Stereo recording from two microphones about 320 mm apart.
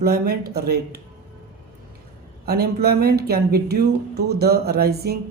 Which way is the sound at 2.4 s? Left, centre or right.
Right.